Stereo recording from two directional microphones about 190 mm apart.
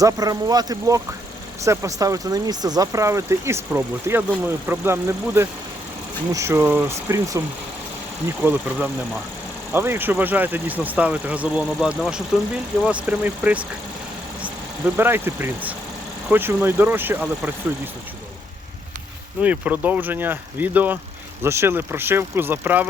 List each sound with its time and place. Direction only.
0.0 s speech: 20° right (ahead or behind)
19.4 s speech: 10° right (ahead or behind)